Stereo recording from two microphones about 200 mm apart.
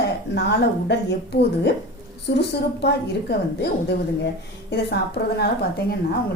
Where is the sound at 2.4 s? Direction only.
55° left (ahead or behind).